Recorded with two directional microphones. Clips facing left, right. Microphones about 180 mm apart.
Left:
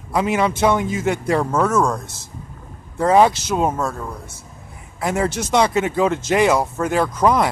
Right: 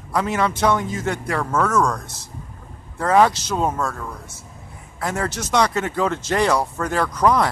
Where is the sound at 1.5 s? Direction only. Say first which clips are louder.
Right 2 dB; 10° left (ahead or behind).